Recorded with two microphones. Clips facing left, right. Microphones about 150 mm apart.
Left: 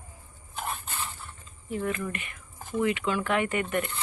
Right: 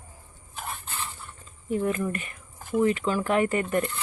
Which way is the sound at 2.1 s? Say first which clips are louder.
Right 4 dB; 40° right (ahead or behind).